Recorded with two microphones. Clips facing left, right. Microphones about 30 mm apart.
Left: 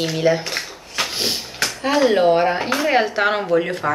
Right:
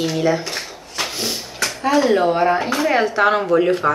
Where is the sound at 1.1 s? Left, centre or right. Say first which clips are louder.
Left 2 dB; left.